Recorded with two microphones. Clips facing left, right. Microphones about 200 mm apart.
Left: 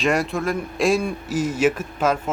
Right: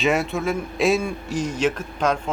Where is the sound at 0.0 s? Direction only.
Centre (ahead or behind).